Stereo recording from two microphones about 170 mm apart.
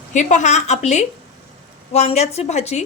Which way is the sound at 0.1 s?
45° left (ahead or behind).